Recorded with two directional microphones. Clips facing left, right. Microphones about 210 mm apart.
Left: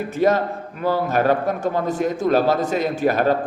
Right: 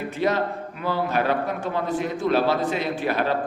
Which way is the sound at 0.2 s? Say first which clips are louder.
Left 5 dB; 45° left (ahead or behind).